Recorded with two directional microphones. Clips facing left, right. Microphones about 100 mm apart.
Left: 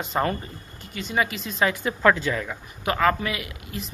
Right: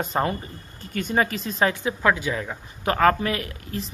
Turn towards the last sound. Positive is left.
turn(degrees=-35)  # may be behind; listen again after turning